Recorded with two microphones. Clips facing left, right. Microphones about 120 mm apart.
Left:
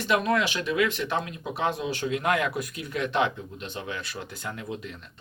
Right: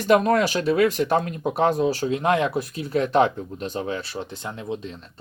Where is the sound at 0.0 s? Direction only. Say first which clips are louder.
Right 6 dB; 45° right (ahead or behind).